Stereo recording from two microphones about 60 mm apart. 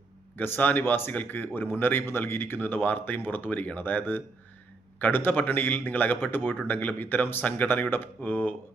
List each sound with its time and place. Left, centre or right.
0.3 s speech: left